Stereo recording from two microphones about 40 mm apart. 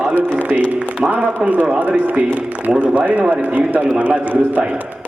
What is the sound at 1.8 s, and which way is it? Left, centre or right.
A man's voice, right.